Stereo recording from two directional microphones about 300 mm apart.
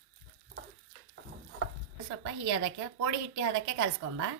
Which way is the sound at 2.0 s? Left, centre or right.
Right.